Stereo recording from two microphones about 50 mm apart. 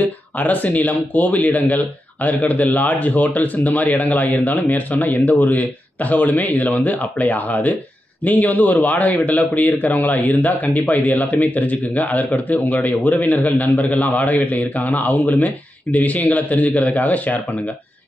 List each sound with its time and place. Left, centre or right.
0.0 s a man's voice: left